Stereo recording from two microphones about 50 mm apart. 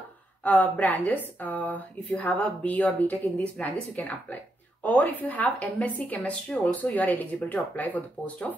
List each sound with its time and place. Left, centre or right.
0.4 s a woman's voice: left